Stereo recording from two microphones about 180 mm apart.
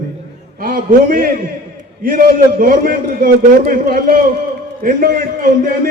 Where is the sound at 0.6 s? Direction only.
50° right (ahead or behind).